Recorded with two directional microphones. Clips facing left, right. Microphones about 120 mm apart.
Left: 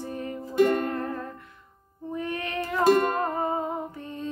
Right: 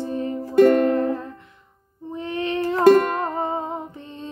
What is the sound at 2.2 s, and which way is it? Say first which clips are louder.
Female singing: right 6 dB; 25° right (ahead or behind).